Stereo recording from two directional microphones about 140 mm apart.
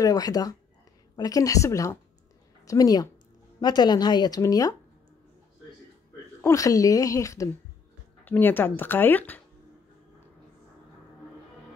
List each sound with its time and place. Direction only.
0.0 s a woman's voice: 25° left (ahead or behind)
6.4 s a woman's voice: 25° left (ahead or behind)